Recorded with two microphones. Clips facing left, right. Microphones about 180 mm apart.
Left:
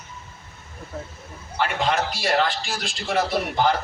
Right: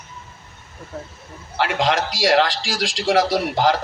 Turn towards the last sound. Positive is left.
turn(degrees=-90)